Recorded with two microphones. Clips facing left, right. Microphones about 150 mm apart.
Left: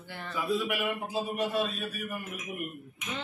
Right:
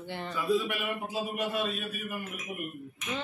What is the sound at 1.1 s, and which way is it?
Speech, 5° right (ahead or behind).